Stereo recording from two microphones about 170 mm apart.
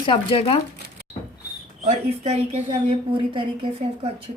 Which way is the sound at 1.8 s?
40° right (ahead or behind).